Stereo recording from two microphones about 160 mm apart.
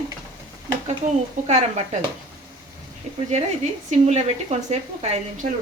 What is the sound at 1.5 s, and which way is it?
Speech, 45° right (ahead or behind).